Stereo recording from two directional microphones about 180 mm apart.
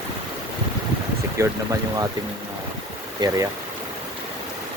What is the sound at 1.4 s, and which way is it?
Speech, 15° right (ahead or behind).